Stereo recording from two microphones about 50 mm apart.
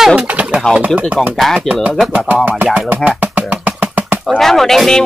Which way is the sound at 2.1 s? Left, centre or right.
Right.